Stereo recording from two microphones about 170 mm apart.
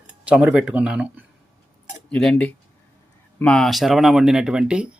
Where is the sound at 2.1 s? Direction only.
5° left (ahead or behind).